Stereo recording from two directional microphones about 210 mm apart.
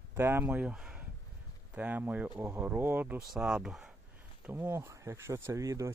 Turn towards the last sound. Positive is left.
turn(degrees=-15)  # may be behind; listen again after turning